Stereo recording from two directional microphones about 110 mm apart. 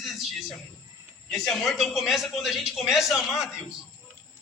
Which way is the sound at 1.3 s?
Centre (ahead or behind).